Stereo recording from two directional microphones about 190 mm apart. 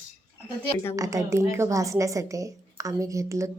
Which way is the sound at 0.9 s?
15° right (ahead or behind).